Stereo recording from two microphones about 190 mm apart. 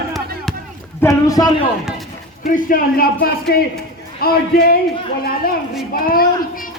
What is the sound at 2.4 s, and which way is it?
Speech, 50° left (ahead or behind).